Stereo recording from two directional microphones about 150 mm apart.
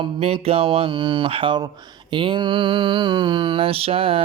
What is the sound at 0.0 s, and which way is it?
Mantra, 40° right (ahead or behind).